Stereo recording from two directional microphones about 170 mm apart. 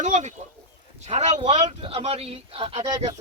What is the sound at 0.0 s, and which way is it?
Speech, 45° right (ahead or behind).